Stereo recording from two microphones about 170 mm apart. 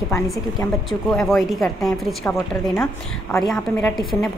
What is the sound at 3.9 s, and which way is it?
Speech, centre (ahead or behind).